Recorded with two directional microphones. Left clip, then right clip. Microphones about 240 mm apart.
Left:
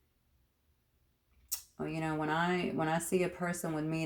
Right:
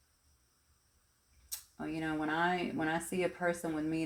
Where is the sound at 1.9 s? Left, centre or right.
Left.